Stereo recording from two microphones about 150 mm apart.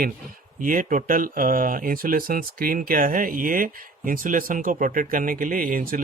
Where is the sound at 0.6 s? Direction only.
65° right (ahead or behind).